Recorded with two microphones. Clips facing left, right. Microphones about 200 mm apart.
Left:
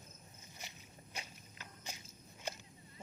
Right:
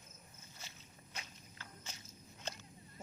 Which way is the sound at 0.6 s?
15° left (ahead or behind).